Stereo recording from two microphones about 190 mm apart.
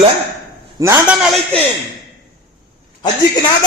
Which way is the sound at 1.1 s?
Centre (ahead or behind).